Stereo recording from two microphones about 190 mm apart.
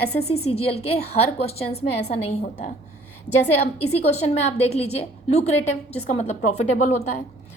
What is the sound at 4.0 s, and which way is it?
A woman's voice, 35° left (ahead or behind).